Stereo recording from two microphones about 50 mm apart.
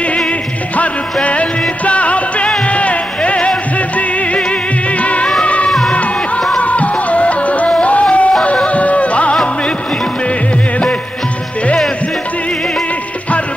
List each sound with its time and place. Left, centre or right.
1.2 s music: left
5.4 s music of bollywood: left
5.7 s music: centre
6.6 s music: left